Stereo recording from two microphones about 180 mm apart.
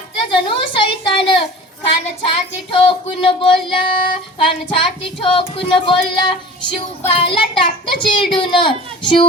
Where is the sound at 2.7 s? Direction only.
30° left (ahead or behind).